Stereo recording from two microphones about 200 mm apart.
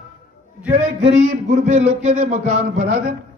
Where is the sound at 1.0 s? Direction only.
35° right (ahead or behind).